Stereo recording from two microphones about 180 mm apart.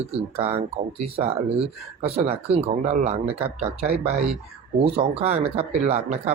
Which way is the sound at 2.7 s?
45° right (ahead or behind).